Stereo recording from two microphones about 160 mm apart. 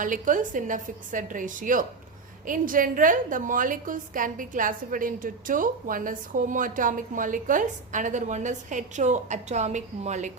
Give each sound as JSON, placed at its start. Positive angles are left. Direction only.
{"t": 0.0, "sound": "a woman's voice", "side_deg": -55}